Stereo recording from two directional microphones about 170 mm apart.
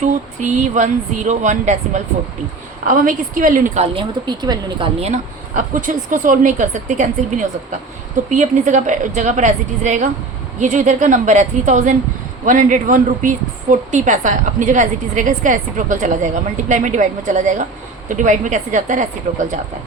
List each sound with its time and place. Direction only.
0.0 s a woman's voice: 45° right (ahead or behind)
3.9 s speech: 25° right (ahead or behind)
4.9 s a woman's voice: 40° right (ahead or behind)